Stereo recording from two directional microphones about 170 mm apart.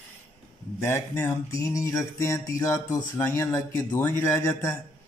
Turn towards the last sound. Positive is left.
turn(degrees=15)  # may be behind; listen again after turning